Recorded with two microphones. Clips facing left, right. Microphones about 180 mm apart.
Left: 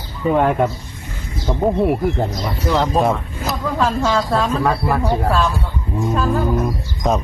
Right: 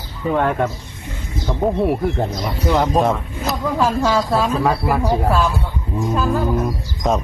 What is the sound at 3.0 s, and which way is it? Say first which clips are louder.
Speech: even; 5° left (ahead or behind).